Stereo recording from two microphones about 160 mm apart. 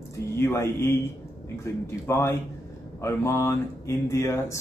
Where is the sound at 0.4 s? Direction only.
15° left (ahead or behind).